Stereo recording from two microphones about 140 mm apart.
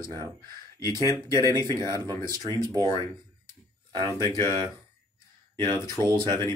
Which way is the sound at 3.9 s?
30° right (ahead or behind).